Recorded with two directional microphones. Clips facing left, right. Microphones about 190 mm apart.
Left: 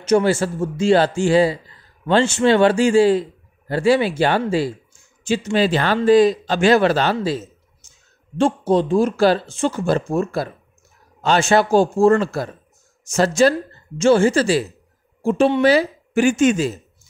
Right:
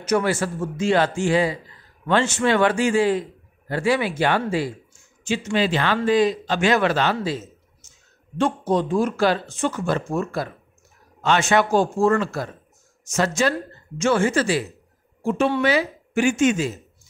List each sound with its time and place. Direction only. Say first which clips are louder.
0.0 s a man's voice: left 5 dB; 30° left (ahead or behind)
8.4 s speech: left 4 dB; 30° left (ahead or behind)